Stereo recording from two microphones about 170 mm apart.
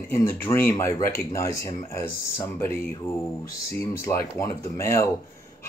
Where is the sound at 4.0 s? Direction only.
20° left (ahead or behind).